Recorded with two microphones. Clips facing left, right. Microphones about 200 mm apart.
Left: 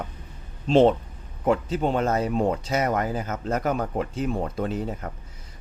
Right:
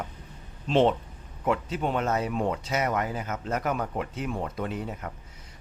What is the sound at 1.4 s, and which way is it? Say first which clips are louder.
Speech: left 4 dB; 35° left (ahead or behind).